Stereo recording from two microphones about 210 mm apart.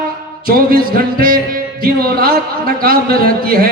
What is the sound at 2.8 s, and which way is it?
Speech, 45° right (ahead or behind).